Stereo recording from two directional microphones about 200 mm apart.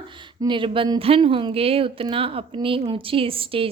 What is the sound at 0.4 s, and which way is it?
A woman's voice, 25° right (ahead or behind).